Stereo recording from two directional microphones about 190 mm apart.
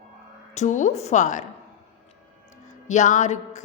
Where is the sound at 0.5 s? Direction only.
40° left (ahead or behind).